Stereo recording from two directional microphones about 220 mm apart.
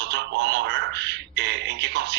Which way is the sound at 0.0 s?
55° right (ahead or behind).